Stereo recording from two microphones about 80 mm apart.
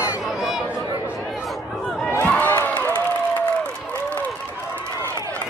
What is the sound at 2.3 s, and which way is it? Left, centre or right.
Crowd, left.